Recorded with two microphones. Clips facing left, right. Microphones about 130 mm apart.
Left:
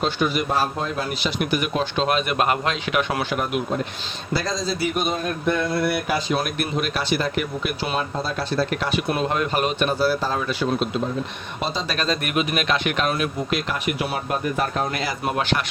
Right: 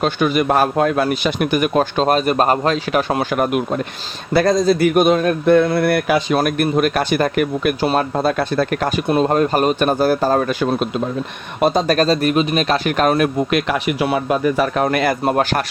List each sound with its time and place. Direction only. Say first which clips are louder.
0.0 s speech: right 6 dB; 60° right (ahead or behind); by 3.2 s 35° right (ahead or behind)
3.3 s speech: right 6 dB; 50° right (ahead or behind)
5.1 s speech: right 10 dB; 85° right
6.4 s speech: right 9 dB; 50° right (ahead or behind)
9.0 s speech: right 10 dB; 35° right (ahead or behind); by 15.1 s 65° right (ahead or behind)
15.3 s speech: right 2 dB; 45° right (ahead or behind)